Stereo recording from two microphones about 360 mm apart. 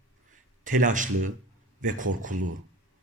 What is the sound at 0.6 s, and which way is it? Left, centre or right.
Speech, right.